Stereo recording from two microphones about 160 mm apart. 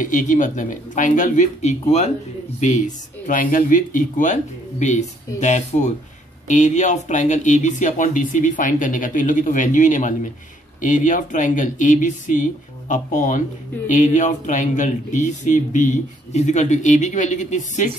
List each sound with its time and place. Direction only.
0.0 s speech: 55° left (ahead or behind)
3.3 s speech: 55° left (ahead or behind)